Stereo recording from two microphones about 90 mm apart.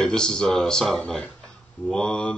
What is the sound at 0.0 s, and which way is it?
Speech, 10° left (ahead or behind).